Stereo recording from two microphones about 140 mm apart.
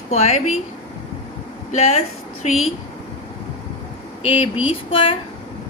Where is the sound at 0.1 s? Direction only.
50° left (ahead or behind).